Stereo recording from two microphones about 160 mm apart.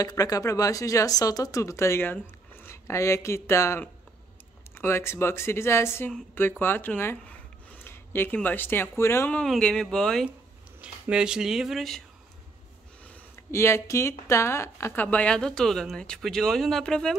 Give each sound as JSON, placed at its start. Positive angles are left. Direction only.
{"t": 0.0, "sound": "speech", "side_deg": 20}
{"t": 13.0, "sound": "speech", "side_deg": 15}